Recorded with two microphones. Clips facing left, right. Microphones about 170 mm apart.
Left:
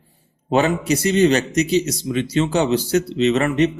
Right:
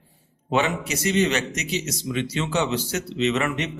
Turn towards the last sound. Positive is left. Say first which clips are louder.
# left 7 dB
turn(degrees=35)  # may be behind; listen again after turning